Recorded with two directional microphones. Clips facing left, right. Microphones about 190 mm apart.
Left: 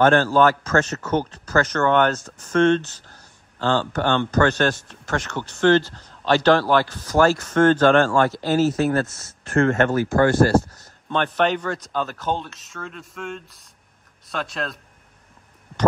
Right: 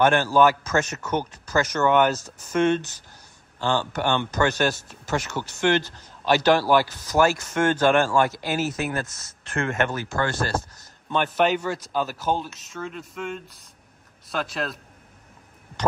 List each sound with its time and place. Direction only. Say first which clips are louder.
0.0 s speech: left 2 dB; 15° right (ahead or behind)
10.1 s speech: left 10 dB; 35° left (ahead or behind)
11.1 s speech: left 1 dB; 5° right (ahead or behind)